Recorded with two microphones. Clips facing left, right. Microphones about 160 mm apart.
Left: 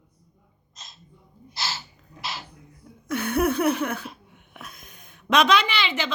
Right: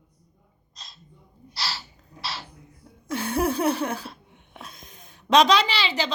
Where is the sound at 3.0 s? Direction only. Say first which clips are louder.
Left 2 dB; 30° right (ahead or behind).